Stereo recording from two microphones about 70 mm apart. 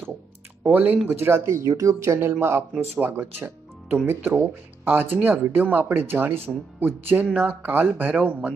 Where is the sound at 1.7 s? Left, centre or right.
Right.